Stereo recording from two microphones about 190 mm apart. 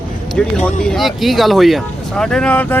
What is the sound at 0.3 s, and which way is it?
Speech, 5° left (ahead or behind).